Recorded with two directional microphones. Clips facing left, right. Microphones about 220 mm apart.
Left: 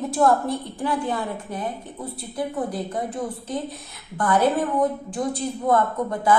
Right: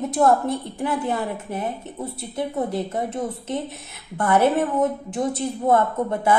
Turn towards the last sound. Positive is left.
turn(degrees=-25)  # may be behind; listen again after turning